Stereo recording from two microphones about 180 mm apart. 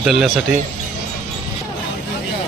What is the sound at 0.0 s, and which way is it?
Speech, 5° right (ahead or behind).